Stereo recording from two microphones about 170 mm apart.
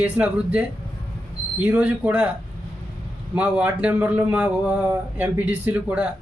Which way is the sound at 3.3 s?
10° right (ahead or behind).